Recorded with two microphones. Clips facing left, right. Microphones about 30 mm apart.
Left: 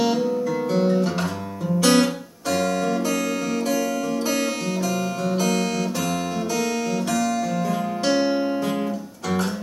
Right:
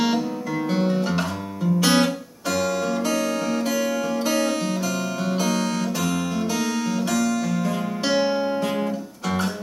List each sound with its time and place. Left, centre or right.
0.0 s guitar: centre
2.8 s music: centre
3.6 s music: centre
4.2 s music: centre
5.4 s guitar: centre
7.1 s music: centre